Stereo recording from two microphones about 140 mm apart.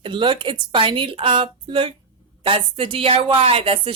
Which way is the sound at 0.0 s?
35° right (ahead or behind).